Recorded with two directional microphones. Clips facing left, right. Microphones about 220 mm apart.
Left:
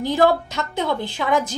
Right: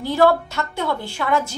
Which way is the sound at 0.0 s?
15° left (ahead or behind).